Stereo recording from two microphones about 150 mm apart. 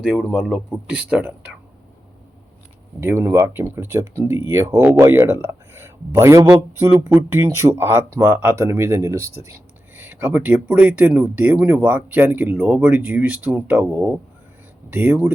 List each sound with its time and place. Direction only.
0.0 s speech: centre (ahead or behind)
3.0 s speech: 15° right (ahead or behind)